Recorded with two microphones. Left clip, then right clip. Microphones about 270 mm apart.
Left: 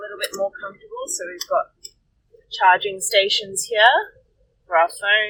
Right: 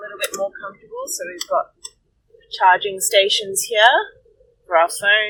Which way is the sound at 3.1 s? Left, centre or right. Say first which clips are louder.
Right 3 dB; centre.